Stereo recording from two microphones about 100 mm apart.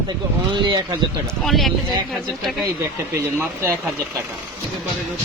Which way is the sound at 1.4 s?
Centre (ahead or behind).